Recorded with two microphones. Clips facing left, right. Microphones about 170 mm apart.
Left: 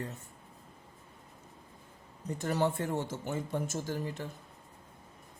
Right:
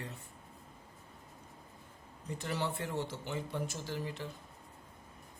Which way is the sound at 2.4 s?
45° left (ahead or behind).